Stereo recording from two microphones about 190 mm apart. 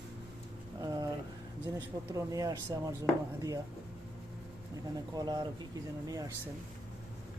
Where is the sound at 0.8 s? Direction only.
20° right (ahead or behind).